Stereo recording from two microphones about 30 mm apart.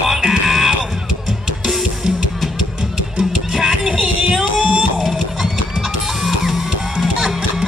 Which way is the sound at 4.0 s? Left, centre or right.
Right.